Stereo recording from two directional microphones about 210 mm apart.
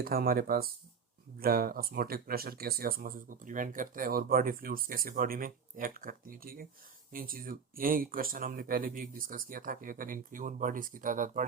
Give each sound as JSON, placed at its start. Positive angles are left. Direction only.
{"t": 0.0, "sound": "speech", "side_deg": -45}